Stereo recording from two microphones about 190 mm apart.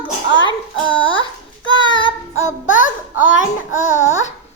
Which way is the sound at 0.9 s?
25° left (ahead or behind).